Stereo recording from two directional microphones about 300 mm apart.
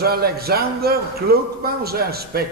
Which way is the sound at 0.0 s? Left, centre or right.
Right.